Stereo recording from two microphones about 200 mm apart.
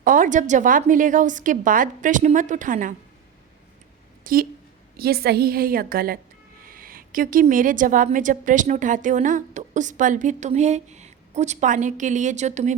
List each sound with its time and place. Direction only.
0.0 s a woman's voice: 40° right (ahead or behind)
4.2 s a woman's voice: 45° right (ahead or behind)